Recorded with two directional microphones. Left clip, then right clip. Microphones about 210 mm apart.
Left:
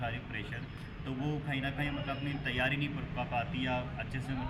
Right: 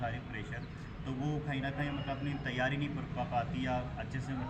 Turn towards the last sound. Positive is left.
turn(degrees=0)  # may be behind; listen again after turning